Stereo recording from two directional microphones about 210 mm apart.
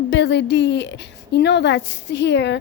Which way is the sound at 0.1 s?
55° left (ahead or behind).